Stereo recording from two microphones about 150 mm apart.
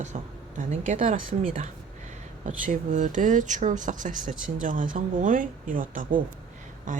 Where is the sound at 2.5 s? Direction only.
60° right (ahead or behind).